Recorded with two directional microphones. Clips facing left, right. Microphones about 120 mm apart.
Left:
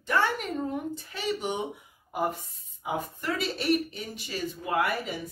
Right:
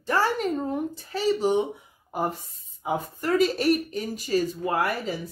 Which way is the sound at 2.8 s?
40° right (ahead or behind).